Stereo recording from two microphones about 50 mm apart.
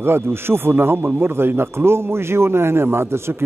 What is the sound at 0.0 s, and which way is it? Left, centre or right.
A man's voice, right.